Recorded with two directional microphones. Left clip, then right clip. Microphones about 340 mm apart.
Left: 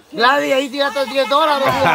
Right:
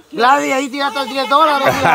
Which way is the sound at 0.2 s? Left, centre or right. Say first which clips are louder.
Right 1 dB; centre.